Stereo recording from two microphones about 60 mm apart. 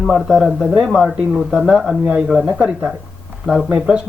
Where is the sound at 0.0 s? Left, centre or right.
Centre.